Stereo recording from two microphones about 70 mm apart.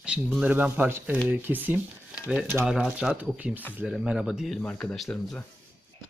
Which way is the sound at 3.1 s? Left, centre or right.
Right.